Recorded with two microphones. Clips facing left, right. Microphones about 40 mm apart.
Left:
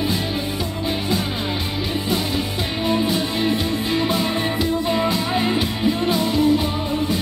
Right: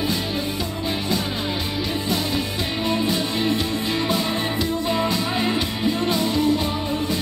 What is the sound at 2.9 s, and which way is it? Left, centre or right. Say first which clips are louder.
Music: left 3 dB; centre.